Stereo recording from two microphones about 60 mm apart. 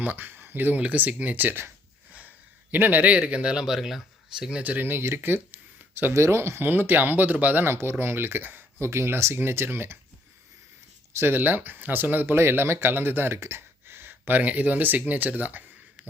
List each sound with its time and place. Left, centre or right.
0.0 s speech: right
2.7 s speech: right; by 4.6 s centre
4.6 s speech: right
6.1 s speech: right
8.8 s speech: right
11.1 s speech: right